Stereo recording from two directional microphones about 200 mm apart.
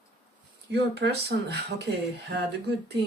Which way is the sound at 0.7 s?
55° right (ahead or behind).